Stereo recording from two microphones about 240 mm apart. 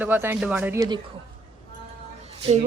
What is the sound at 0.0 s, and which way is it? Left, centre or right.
Speech, centre.